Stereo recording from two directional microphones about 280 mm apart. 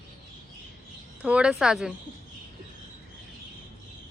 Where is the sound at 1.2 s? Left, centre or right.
Centre.